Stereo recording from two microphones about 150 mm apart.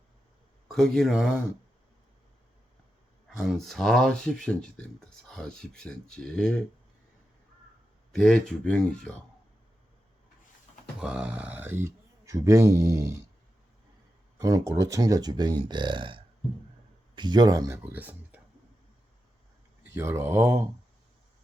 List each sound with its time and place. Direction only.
0.7 s speech: 5° left (ahead or behind)
3.2 s speech: centre (ahead or behind)
8.1 s speech: 5° left (ahead or behind)
11.0 s speech: 5° right (ahead or behind)
14.4 s speech: 20° right (ahead or behind)
19.8 s speech: 15° right (ahead or behind)